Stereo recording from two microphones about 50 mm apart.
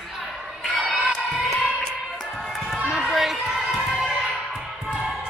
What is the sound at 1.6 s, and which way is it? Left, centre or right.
Music, centre.